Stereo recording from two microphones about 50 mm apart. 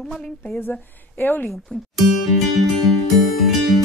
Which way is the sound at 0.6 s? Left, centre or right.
Left.